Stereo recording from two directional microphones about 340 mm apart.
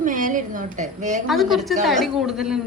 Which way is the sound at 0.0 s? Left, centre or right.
Right.